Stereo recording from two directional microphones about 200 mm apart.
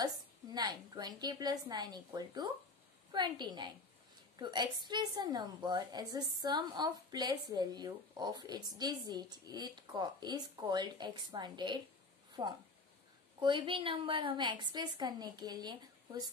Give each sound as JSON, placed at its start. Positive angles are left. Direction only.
{"t": 0.6, "sound": "a woman's voice", "side_deg": -20}